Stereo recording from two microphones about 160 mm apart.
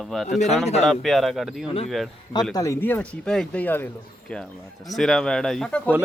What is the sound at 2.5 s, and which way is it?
Speech, 20° left (ahead or behind).